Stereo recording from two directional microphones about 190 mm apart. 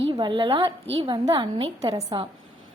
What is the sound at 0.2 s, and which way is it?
A woman's voice, 25° right (ahead or behind).